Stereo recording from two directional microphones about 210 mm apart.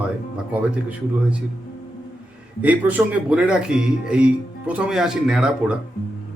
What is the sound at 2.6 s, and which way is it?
Speech, 5° right (ahead or behind).